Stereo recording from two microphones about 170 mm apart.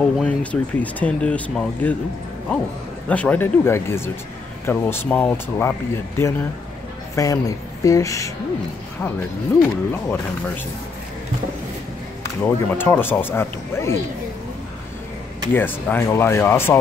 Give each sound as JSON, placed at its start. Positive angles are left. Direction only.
{"t": 0.2, "sound": "speech", "side_deg": 10}
{"t": 3.1, "sound": "speech", "side_deg": 10}
{"t": 9.6, "sound": "speech", "side_deg": 10}
{"t": 12.4, "sound": "speech", "side_deg": 10}
{"t": 15.5, "sound": "speech", "side_deg": 10}